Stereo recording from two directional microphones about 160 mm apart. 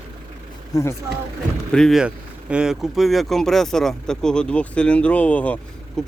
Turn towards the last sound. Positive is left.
turn(degrees=5)  # may be behind; listen again after turning